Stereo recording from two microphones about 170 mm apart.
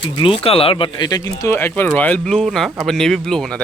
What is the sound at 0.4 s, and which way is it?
Speech, 35° left (ahead or behind).